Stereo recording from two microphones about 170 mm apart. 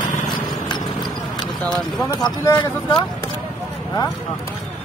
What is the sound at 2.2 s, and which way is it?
Speech, 25° left (ahead or behind).